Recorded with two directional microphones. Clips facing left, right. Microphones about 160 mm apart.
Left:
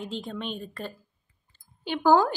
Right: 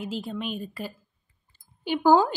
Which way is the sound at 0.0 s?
5° right (ahead or behind).